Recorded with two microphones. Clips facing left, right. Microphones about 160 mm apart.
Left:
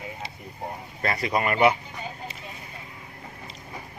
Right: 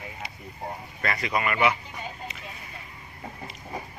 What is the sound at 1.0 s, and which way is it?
Speech, 35° left (ahead or behind).